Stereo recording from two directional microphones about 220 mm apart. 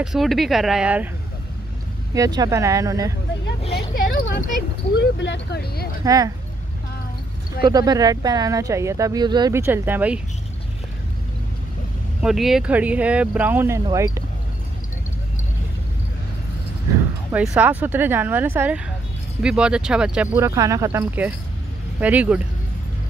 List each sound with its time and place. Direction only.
0.0 s speech: centre (ahead or behind)
2.1 s speech: 15° right (ahead or behind)
3.9 s speech: 40° left (ahead or behind)
6.0 s speech: 15° right (ahead or behind)
7.6 s speech: 15° right (ahead or behind)
12.2 s speech: centre (ahead or behind)
17.3 s speech: 5° right (ahead or behind)